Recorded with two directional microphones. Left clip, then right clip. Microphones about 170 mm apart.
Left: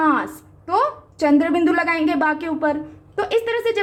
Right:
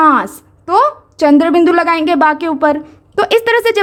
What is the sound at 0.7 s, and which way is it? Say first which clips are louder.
A woman's voice: right 8 dB; 35° right (ahead or behind).